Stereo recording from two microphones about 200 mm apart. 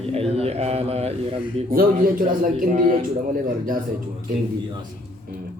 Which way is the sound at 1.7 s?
45° right (ahead or behind).